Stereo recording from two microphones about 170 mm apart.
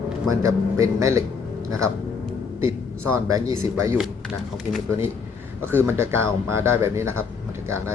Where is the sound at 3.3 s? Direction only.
20° right (ahead or behind).